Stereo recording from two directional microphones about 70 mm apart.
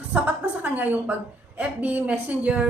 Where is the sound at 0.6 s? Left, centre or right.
Right.